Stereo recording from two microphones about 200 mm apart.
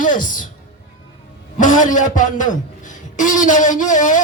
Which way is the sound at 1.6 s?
40° left (ahead or behind).